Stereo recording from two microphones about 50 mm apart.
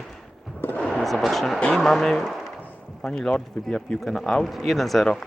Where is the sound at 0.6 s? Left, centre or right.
Left.